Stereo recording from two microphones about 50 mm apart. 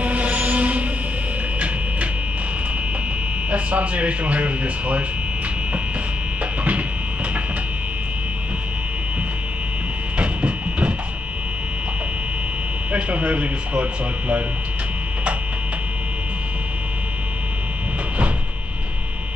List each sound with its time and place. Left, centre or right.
0.0 s music: right
3.4 s speech: right
10.1 s music: right
12.9 s speech: right